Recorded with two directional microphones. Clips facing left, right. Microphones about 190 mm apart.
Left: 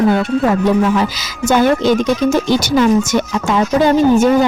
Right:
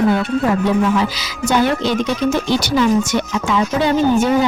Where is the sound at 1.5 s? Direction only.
45° left (ahead or behind).